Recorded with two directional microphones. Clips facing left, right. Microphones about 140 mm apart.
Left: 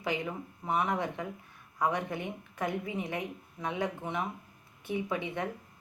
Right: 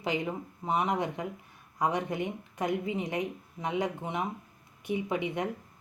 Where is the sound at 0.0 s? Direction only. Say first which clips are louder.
Right 2 dB; 20° right (ahead or behind).